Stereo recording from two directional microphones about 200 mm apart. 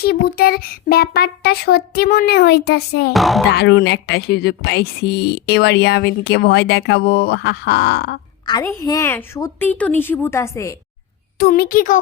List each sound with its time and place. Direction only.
0.0 s speech: 50° left (ahead or behind)
3.1 s music: centre (ahead or behind)
3.5 s speech: 55° left (ahead or behind)
8.4 s a woman's voice: 15° left (ahead or behind)
11.3 s speech: 50° left (ahead or behind)